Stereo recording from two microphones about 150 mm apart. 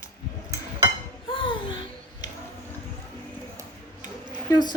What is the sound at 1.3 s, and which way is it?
Babbling, 35° left (ahead or behind).